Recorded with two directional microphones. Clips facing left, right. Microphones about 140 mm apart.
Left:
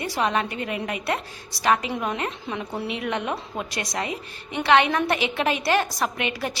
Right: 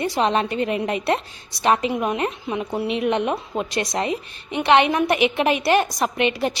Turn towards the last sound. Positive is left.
turn(degrees=-25)  # may be behind; listen again after turning